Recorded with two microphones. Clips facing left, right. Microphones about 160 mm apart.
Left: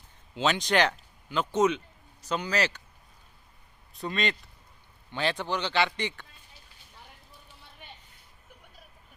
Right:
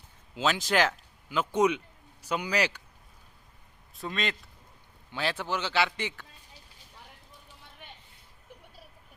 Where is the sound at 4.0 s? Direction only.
Centre (ahead or behind).